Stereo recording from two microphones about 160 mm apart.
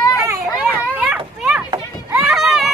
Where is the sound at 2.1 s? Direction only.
5° right (ahead or behind).